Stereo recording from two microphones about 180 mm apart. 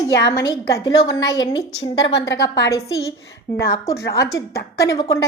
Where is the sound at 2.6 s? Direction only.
20° left (ahead or behind).